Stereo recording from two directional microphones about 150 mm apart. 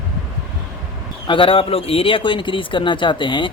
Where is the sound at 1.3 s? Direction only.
35° left (ahead or behind).